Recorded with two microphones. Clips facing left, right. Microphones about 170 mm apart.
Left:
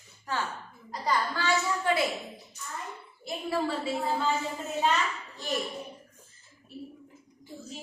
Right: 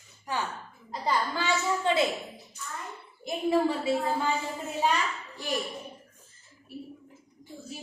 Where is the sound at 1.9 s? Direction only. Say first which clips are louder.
Right 2 dB; 25° right (ahead or behind).